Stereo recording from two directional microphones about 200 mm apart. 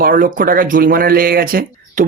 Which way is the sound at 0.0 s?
45° right (ahead or behind).